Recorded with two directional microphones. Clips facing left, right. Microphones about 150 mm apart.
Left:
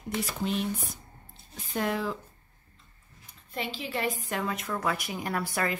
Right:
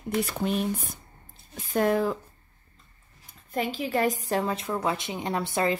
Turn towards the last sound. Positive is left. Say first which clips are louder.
# right 4 dB
turn(degrees=-25)  # may be behind; listen again after turning